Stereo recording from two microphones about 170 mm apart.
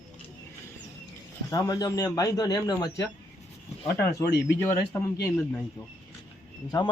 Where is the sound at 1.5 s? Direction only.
20° left (ahead or behind).